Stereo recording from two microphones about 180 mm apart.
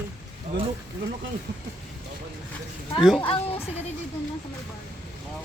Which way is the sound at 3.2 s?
30° left (ahead or behind).